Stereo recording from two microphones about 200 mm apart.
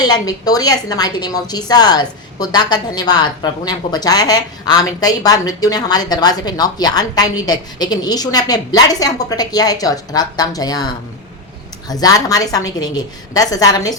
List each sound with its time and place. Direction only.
0.0 s a woman's voice: 20° left (ahead or behind)
11.9 s a woman's voice: 20° left (ahead or behind)